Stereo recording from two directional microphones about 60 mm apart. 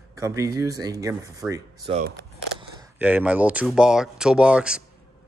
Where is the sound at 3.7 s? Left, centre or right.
Centre.